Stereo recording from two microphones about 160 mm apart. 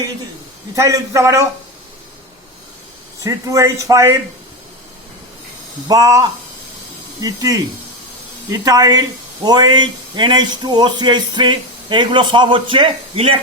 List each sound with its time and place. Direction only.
0.8 s speech: 20° right (ahead or behind)
3.2 s speech: 20° right (ahead or behind)
5.9 s speech: 20° right (ahead or behind)